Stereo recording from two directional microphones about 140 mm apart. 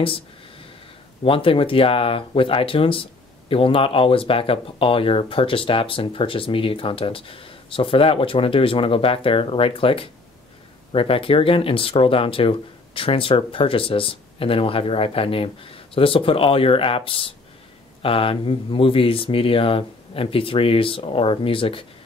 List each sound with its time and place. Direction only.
1.2 s speech: 40° left (ahead or behind)